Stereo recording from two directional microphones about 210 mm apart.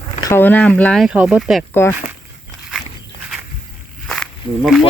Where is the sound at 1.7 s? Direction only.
10° left (ahead or behind).